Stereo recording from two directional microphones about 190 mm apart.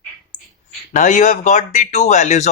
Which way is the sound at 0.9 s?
40° left (ahead or behind).